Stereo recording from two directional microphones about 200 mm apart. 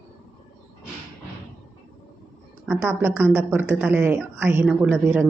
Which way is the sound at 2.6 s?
5° right (ahead or behind).